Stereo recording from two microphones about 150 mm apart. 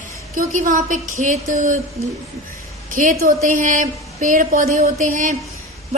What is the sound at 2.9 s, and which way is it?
A woman's voice, 60° right (ahead or behind).